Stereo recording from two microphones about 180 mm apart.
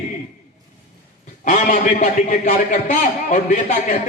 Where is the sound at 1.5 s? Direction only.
40° left (ahead or behind).